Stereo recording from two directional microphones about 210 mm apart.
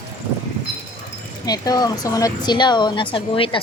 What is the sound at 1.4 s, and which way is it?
Speech, 20° left (ahead or behind).